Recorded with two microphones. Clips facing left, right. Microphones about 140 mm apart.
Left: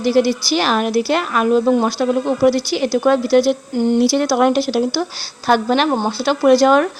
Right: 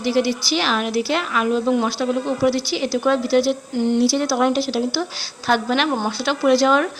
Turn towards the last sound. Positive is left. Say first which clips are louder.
# left 4 dB
turn(degrees=45)  # may be behind; listen again after turning